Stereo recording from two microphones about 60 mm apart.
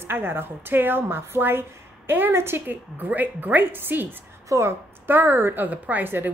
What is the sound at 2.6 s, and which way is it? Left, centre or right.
Speech, right.